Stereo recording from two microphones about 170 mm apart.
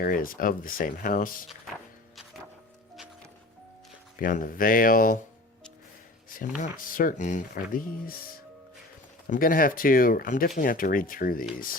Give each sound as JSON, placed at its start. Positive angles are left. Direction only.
{"t": 0.0, "sound": "speech", "side_deg": 55}
{"t": 4.2, "sound": "speech", "side_deg": 50}
{"t": 6.2, "sound": "speech", "side_deg": 50}